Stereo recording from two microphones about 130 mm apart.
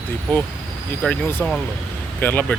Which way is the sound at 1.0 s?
10° left (ahead or behind).